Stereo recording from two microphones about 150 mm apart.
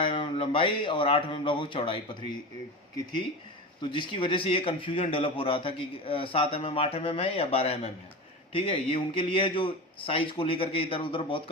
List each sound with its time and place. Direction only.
0.0 s a man's voice: 35° left (ahead or behind)
3.9 s a man's voice: 35° left (ahead or behind)